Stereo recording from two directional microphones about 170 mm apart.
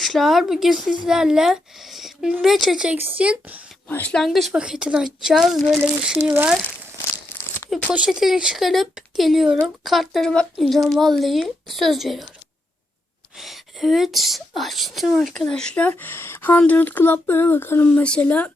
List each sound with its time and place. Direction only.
0.0 s speech: centre (ahead or behind)
3.8 s speech: 10° left (ahead or behind); by 6.6 s 5° right (ahead or behind)
7.3 s crumpling: 10° left (ahead or behind)
7.9 s speech: 5° right (ahead or behind)
13.4 s a woman's voice: centre (ahead or behind)